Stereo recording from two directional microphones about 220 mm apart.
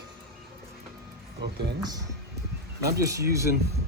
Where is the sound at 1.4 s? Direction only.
50° right (ahead or behind).